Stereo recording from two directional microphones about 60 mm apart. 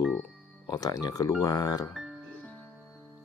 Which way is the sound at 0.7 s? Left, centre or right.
Left.